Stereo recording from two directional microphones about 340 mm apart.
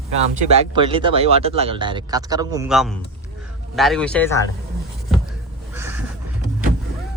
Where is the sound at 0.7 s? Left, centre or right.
Centre.